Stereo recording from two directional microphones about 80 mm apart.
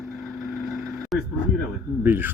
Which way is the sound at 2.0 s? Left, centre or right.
Right.